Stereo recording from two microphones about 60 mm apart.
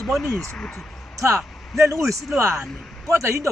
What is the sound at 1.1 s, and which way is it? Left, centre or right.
A man's voice, right.